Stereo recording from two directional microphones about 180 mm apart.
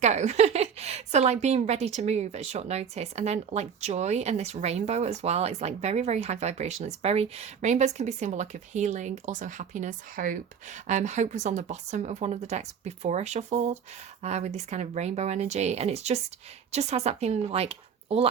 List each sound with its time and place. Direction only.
0.0 s a woman's voice: 40° right (ahead or behind)